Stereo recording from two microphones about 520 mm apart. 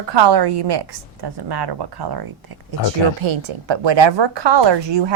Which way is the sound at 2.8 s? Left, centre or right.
Left.